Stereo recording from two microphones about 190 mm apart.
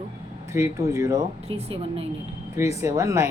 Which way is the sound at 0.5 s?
15° right (ahead or behind).